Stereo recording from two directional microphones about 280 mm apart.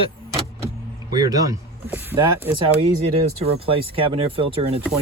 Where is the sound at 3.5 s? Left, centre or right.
Centre.